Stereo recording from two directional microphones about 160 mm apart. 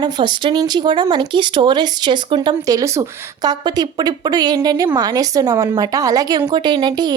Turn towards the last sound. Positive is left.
turn(degrees=-25)  # may be behind; listen again after turning